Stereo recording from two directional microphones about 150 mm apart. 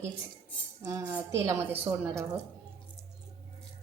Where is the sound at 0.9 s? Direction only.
20° right (ahead or behind).